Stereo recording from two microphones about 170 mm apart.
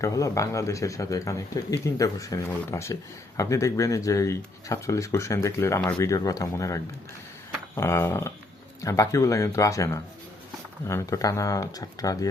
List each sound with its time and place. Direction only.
0.0 s speech: 20° left (ahead or behind)
7.8 s a sound: 15° left (ahead or behind)
8.8 s speech: 20° left (ahead or behind)